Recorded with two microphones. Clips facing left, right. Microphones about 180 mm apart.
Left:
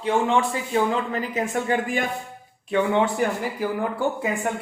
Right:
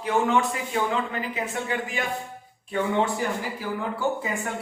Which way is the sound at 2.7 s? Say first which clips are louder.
Left 5 dB; 80° left.